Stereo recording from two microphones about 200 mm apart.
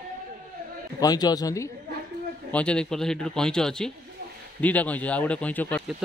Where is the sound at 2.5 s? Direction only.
5° left (ahead or behind).